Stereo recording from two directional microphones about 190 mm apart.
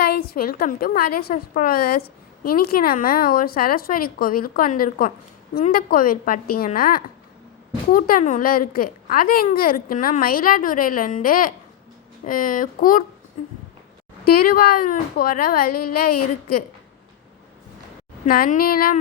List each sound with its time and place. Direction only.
0.0 s a woman's voice: 50° left (ahead or behind)
14.3 s a woman's voice: 50° left (ahead or behind)
18.3 s a woman's voice: 50° left (ahead or behind)